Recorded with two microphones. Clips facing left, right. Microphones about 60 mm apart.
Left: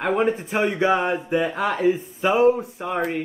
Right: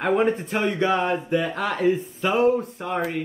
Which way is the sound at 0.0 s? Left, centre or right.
Centre.